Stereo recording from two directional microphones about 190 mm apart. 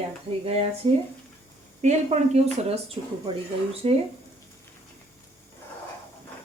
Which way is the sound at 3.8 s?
30° right (ahead or behind).